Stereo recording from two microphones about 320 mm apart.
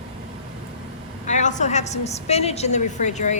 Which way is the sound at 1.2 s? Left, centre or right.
Left.